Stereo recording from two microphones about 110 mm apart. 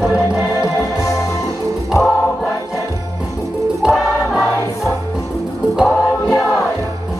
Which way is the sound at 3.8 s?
Centre (ahead or behind).